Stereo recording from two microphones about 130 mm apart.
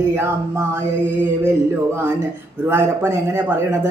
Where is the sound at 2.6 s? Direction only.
20° right (ahead or behind).